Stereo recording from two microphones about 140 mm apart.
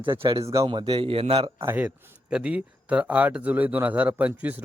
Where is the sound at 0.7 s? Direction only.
40° right (ahead or behind).